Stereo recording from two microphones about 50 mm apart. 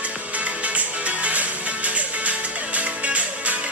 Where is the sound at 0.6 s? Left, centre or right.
Right.